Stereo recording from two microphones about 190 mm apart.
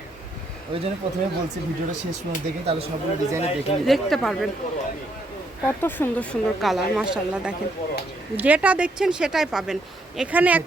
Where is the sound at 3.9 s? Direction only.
Centre (ahead or behind).